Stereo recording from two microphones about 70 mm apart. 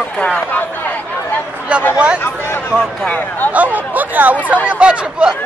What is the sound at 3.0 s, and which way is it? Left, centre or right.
Speech, left.